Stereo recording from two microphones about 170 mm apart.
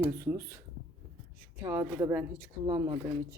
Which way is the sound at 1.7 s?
10° right (ahead or behind).